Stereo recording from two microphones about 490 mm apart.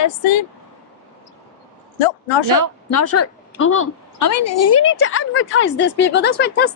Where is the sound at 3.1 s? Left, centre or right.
Left.